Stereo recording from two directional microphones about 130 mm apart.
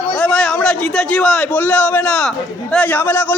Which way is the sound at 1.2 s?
5° left (ahead or behind).